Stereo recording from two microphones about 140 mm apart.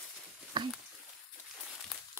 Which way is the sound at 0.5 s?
35° right (ahead or behind).